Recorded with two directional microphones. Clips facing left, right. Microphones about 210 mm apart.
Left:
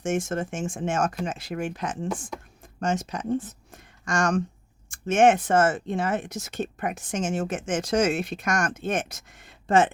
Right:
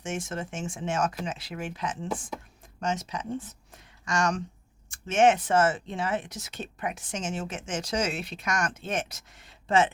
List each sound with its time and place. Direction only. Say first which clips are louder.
0.0 s speech: left 7 dB; 50° left (ahead or behind)